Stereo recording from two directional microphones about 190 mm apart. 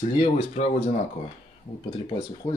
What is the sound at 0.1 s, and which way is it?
Speech, 30° left (ahead or behind).